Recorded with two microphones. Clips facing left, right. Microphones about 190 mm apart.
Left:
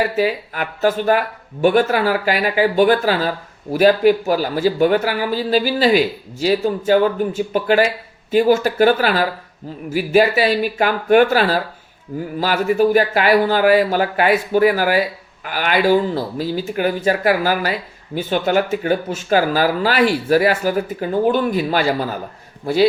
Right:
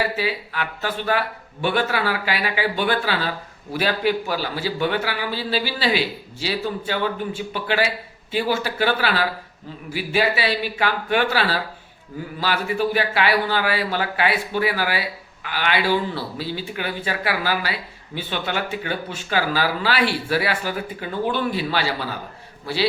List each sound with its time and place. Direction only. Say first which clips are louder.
0.2 s speech: left 6 dB; 45° left (ahead or behind)